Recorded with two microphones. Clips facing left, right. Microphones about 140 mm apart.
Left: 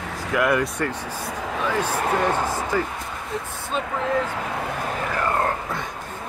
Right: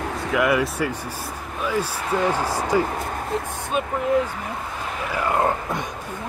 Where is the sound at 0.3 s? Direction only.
Centre (ahead or behind).